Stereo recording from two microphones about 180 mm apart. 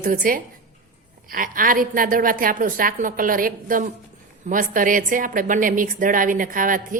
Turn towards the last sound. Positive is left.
turn(degrees=-50)  # may be behind; listen again after turning